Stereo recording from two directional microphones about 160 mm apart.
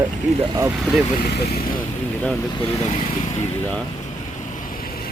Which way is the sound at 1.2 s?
90° left.